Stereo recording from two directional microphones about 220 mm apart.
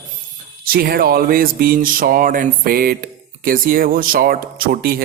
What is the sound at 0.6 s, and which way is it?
Speech, 40° right (ahead or behind).